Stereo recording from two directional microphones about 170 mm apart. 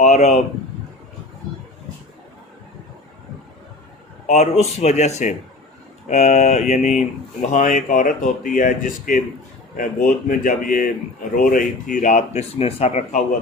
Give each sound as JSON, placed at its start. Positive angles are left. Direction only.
{"t": 0.0, "sound": "speech", "side_deg": 40}
{"t": 4.3, "sound": "speech", "side_deg": 40}